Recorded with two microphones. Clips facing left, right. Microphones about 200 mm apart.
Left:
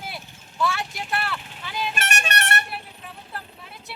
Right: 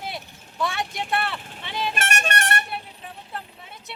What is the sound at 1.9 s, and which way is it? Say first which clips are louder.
Vehicle horn: right 2 dB; 50° right (ahead or behind).